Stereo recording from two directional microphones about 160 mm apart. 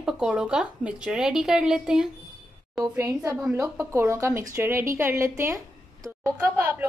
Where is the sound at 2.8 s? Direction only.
20° right (ahead or behind).